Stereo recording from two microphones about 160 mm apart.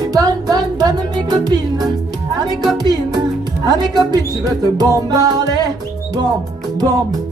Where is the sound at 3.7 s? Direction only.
25° right (ahead or behind).